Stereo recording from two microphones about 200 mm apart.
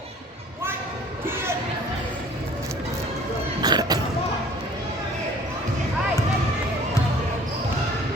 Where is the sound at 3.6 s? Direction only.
20° right (ahead or behind).